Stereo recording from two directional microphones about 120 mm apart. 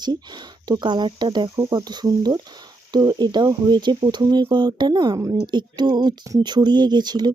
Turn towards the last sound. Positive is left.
turn(degrees=-35)  # may be behind; listen again after turning